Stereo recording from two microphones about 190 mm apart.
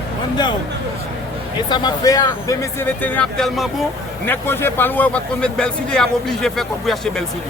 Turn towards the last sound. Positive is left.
turn(degrees=0)  # may be behind; listen again after turning